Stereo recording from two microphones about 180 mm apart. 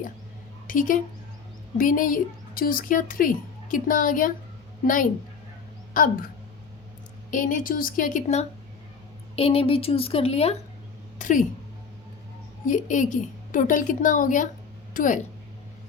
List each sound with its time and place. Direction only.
0.7 s a woman's voice: 50° left (ahead or behind)
5.9 s a woman's voice: 50° left (ahead or behind)
7.3 s a woman's voice: 45° left (ahead or behind)
9.3 s a woman's voice: 30° left (ahead or behind)
11.2 s a woman's voice: 45° left (ahead or behind)
12.6 s a woman's voice: 45° left (ahead or behind)